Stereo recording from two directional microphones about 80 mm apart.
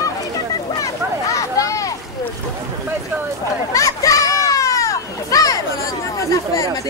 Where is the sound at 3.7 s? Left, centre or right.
Left.